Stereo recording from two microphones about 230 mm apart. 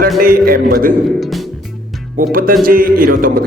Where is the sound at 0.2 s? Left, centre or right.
Right.